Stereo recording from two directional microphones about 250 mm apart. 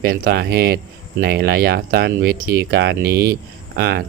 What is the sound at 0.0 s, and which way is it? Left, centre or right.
Speech, right.